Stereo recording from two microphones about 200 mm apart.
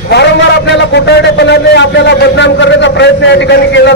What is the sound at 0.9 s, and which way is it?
A man's voice, 60° left (ahead or behind).